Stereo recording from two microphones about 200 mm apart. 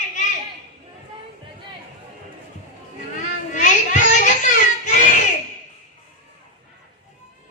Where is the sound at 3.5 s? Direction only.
40° left (ahead or behind).